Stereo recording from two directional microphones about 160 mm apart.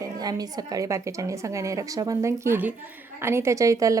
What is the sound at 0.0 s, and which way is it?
A woman's voice, 25° right (ahead or behind).